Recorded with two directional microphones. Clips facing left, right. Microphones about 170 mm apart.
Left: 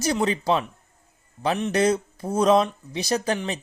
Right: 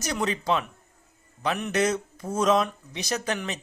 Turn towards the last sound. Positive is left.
turn(degrees=30)  # may be behind; listen again after turning